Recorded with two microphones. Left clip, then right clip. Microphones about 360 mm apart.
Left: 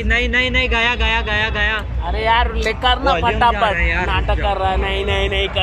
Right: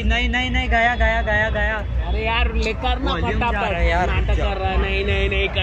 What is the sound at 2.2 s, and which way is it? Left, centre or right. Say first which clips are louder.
Speech: left 6 dB; left.